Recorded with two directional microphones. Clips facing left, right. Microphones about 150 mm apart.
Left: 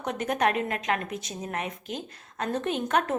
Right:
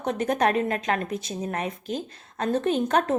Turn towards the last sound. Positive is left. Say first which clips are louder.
# right 4 dB
turn(degrees=-35)  # may be behind; listen again after turning